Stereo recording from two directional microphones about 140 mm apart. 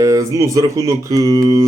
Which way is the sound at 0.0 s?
25° right (ahead or behind).